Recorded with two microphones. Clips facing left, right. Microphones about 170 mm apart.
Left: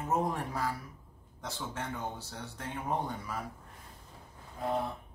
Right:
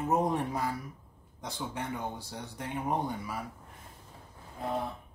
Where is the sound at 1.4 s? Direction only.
15° right (ahead or behind).